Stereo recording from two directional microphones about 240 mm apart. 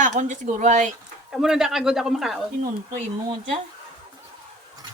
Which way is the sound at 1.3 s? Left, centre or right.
Centre.